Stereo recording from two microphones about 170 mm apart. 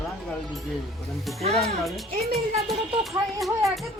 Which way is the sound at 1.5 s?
Centre (ahead or behind).